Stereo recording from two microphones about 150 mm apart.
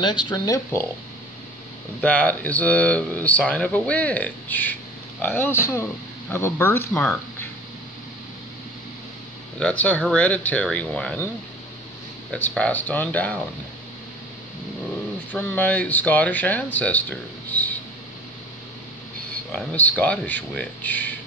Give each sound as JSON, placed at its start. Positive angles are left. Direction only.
{"t": 0.0, "sound": "speech", "side_deg": 30}
{"t": 2.0, "sound": "speech", "side_deg": 10}
{"t": 9.6, "sound": "speech", "side_deg": 10}
{"t": 12.3, "sound": "speech", "side_deg": 10}
{"t": 15.3, "sound": "speech", "side_deg": 10}
{"t": 19.5, "sound": "speech", "side_deg": 10}